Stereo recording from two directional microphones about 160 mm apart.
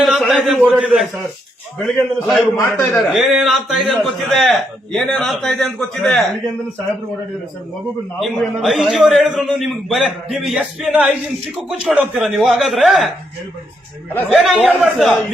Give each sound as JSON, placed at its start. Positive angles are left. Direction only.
{"t": 0.0, "sound": "a man's voice", "side_deg": 0}
{"t": 8.2, "sound": "a man's voice", "side_deg": 0}
{"t": 14.3, "sound": "a man's voice", "side_deg": -5}